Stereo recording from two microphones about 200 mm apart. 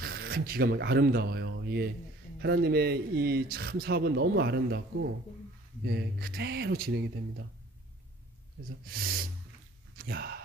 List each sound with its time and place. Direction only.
0.0 s speech: 50° right (ahead or behind)
5.9 s speech: 50° right (ahead or behind)
9.9 s speech: 50° right (ahead or behind)